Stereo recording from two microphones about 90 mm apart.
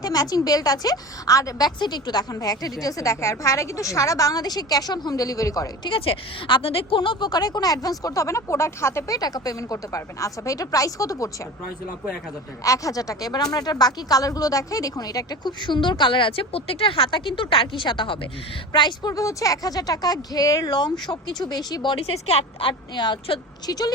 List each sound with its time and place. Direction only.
0.0 s a woman's voice: 45° left (ahead or behind)
5.8 s speech: 70° left (ahead or behind); by 11.3 s 40° left (ahead or behind)
12.6 s speech: 40° left (ahead or behind); by 19.1 s 55° left (ahead or behind)
19.1 s speech: 40° left (ahead or behind)
20.7 s speech: 55° left (ahead or behind); by 23.4 s 70° left (ahead or behind)
23.6 s a woman's voice: 45° left (ahead or behind)